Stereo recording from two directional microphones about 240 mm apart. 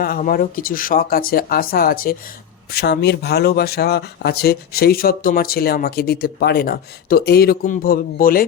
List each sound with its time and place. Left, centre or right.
0.0 s speech: left